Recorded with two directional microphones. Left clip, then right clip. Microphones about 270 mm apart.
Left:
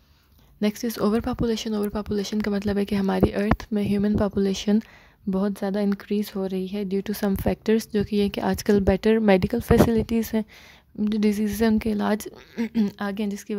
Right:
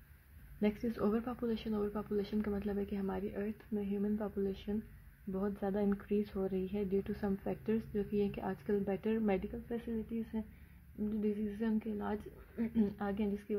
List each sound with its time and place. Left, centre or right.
0.6 s speech: left
11.1 s a woman's voice: left